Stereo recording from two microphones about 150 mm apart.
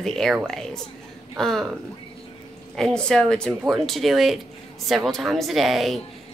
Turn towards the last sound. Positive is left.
turn(degrees=0)  # may be behind; listen again after turning